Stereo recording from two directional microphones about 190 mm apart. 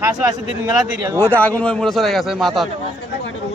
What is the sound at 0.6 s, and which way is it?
Speech, 15° right (ahead or behind).